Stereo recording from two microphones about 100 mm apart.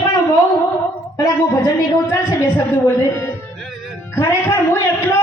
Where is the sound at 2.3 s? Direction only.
30° left (ahead or behind).